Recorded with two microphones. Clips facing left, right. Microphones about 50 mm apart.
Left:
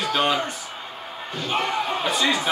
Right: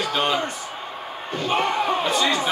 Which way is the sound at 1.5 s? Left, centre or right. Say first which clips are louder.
Right 3 dB; right.